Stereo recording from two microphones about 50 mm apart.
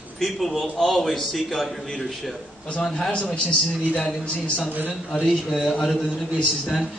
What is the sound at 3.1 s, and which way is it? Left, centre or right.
Speech, left.